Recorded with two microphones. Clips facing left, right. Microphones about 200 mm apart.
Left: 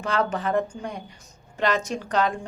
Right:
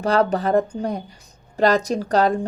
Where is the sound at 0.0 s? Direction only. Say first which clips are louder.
Right 6 dB; 35° right (ahead or behind).